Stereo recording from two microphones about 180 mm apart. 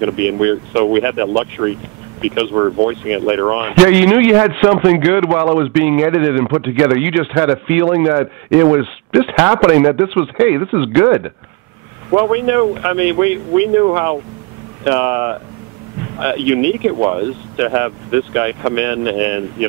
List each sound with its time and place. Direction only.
0.0 s speech: 15° right (ahead or behind)